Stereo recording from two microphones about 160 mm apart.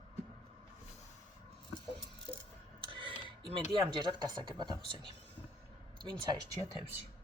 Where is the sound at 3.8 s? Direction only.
25° right (ahead or behind).